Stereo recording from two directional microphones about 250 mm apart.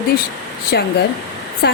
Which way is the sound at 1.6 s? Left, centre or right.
Left.